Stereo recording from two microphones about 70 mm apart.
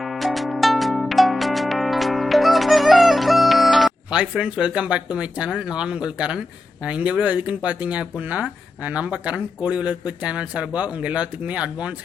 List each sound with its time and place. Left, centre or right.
0.0 s music: centre
4.1 s speech: centre